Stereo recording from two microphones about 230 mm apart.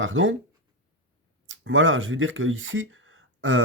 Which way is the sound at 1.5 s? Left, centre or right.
Right.